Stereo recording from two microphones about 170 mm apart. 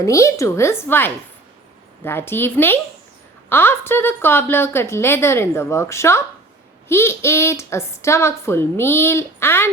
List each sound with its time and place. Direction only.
0.0 s a woman's voice: 20° left (ahead or behind)